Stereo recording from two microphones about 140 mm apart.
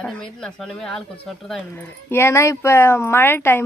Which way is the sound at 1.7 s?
15° left (ahead or behind).